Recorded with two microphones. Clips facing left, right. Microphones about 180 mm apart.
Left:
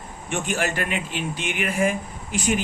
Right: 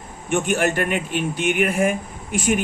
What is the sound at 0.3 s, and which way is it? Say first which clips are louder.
Speech: right 6 dB; 55° right (ahead or behind).